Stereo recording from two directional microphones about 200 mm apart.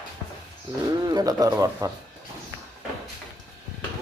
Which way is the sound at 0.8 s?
20° right (ahead or behind).